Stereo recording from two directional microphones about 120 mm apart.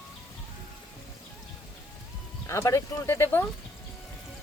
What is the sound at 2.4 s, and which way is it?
Speech, 25° left (ahead or behind).